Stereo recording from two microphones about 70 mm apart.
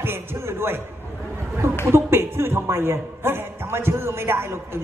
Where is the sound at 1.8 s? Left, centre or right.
Right.